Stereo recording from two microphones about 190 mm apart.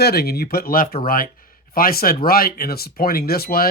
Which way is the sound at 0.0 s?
55° left (ahead or behind).